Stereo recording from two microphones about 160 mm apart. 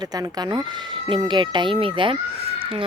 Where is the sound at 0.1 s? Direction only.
25° right (ahead or behind).